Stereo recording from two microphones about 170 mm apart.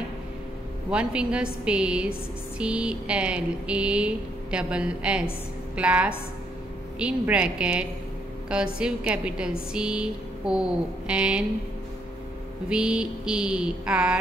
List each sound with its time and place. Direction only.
0.8 s a woman's voice: 5° right (ahead or behind)
12.6 s a woman's voice: 5° right (ahead or behind)